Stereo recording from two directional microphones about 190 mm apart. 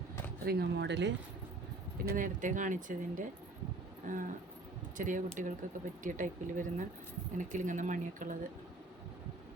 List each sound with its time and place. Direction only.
0.4 s speech: 60° right (ahead or behind)
2.0 s speech: 45° right (ahead or behind)
4.0 s a sound: 45° right (ahead or behind)
4.9 s speech: 45° right (ahead or behind)